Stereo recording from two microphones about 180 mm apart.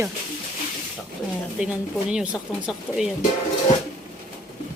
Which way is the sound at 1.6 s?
5° right (ahead or behind).